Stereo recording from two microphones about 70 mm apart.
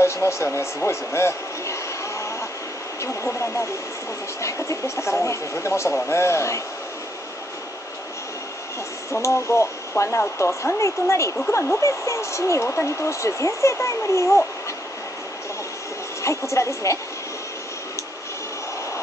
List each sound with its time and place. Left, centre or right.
0.0 s a man's voice: left
9.1 s speech: left
16.2 s speech: left